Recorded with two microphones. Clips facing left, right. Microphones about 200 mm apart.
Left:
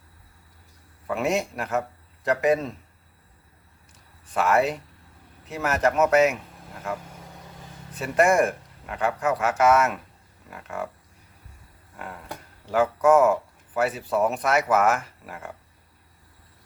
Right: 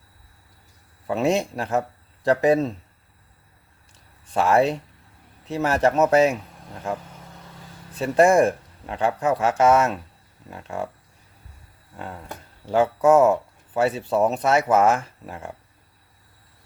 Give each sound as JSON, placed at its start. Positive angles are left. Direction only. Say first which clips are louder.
{"t": 1.0, "sound": "speech", "louder": "right 3 dB", "side_deg": -25}
{"t": 4.4, "sound": "speech", "louder": "right 3 dB", "side_deg": -30}
{"t": 7.9, "sound": "speech", "louder": "right 4 dB", "side_deg": -30}
{"t": 12.7, "sound": "speech", "louder": "right 2 dB", "side_deg": -25}